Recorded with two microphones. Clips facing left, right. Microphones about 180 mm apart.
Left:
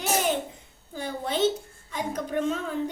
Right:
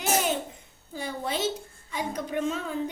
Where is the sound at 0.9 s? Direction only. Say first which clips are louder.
Left 2 dB; 10° right (ahead or behind).